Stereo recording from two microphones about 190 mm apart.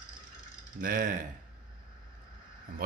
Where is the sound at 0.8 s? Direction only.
45° right (ahead or behind).